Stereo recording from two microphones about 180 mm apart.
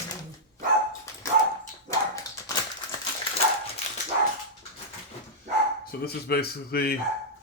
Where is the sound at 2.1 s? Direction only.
20° left (ahead or behind).